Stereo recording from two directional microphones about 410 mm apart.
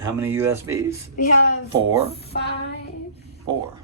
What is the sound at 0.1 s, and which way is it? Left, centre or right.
Speech, centre.